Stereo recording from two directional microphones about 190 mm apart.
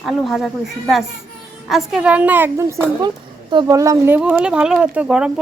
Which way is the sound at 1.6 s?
Centre (ahead or behind).